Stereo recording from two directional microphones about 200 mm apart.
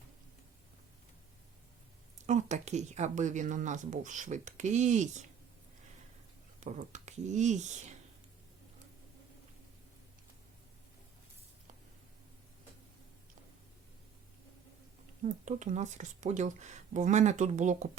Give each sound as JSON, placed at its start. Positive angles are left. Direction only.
{"t": 2.1, "sound": "speech", "side_deg": -35}
{"t": 6.6, "sound": "speech", "side_deg": -35}
{"t": 15.2, "sound": "speech", "side_deg": -35}